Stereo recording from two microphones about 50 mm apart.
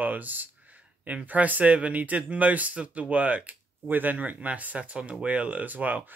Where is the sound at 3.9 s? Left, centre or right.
Right.